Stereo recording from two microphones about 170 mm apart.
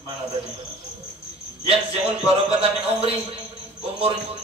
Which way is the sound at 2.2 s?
35° right (ahead or behind).